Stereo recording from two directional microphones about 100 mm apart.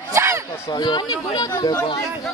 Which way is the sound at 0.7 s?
45° left (ahead or behind).